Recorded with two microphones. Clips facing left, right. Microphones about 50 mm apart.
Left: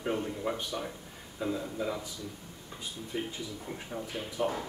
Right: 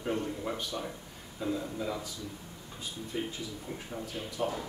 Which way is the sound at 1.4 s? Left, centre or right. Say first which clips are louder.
Left 1 dB; centre.